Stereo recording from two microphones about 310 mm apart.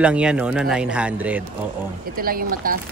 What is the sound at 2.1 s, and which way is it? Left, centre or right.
Speech, right.